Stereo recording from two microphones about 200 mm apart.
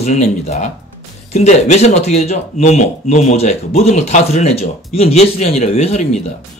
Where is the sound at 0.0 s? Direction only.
35° left (ahead or behind).